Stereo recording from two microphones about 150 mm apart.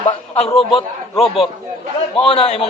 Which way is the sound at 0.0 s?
45° left (ahead or behind).